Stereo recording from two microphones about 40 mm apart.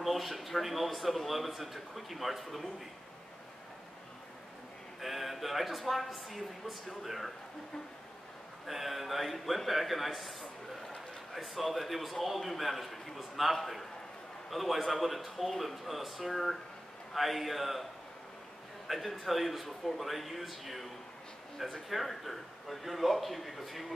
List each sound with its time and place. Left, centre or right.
0.0 s speech: centre
5.0 s speech: centre
8.6 s speech: centre
10.4 s a sound: left
11.3 s speech: centre
18.9 s speech: centre